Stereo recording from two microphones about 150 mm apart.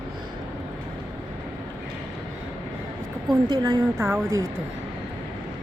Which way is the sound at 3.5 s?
25° right (ahead or behind).